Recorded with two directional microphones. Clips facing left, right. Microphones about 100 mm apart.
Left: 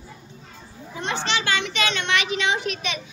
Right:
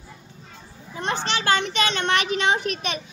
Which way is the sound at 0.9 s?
45° right (ahead or behind).